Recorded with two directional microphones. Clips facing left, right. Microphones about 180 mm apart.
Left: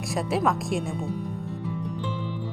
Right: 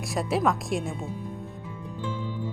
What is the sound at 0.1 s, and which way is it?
Speech, centre (ahead or behind).